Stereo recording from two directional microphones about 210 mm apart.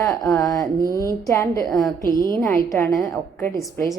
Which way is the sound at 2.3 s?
15° left (ahead or behind).